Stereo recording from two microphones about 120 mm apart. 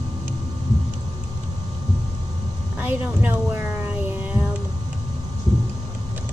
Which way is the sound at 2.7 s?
15° right (ahead or behind).